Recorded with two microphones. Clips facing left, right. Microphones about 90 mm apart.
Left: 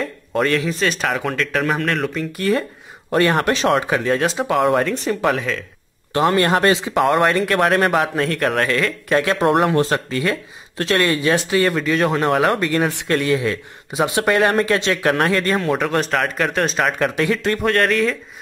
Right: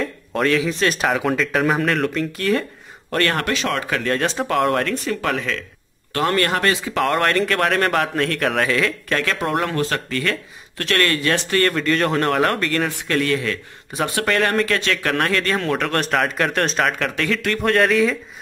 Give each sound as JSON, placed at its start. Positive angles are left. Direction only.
{"t": 0.0, "sound": "speech", "side_deg": 0}
{"t": 3.1, "sound": "a man's voice", "side_deg": 15}
{"t": 3.5, "sound": "speech", "side_deg": 30}
{"t": 4.0, "sound": "speech", "side_deg": 5}
{"t": 6.1, "sound": "speech", "side_deg": 20}
{"t": 7.0, "sound": "speech", "side_deg": 10}
{"t": 9.1, "sound": "a man's voice", "side_deg": 15}
{"t": 15.1, "sound": "speech", "side_deg": 10}
{"t": 17.6, "sound": "speech", "side_deg": 0}